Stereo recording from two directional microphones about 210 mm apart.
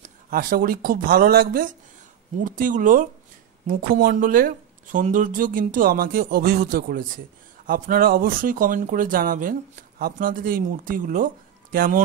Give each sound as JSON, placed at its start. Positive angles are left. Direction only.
{"t": 0.3, "sound": "speech", "side_deg": -40}